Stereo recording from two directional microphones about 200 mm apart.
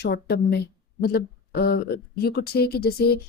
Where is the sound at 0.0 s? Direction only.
55° left (ahead or behind).